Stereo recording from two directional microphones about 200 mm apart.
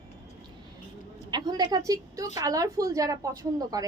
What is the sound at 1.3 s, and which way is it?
A woman's voice, 20° right (ahead or behind).